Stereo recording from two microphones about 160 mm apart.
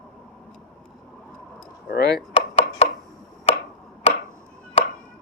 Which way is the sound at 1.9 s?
90° left.